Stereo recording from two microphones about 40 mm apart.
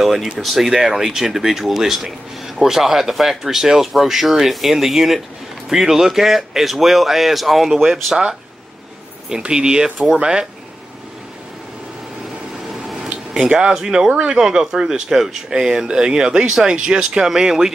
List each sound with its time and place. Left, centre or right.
0.0 s speech: centre
9.4 s speech: right
12.8 s a sound: centre
13.5 s speech: right
13.7 s speech: centre